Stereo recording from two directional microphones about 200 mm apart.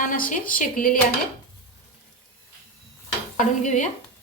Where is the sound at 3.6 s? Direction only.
40° left (ahead or behind).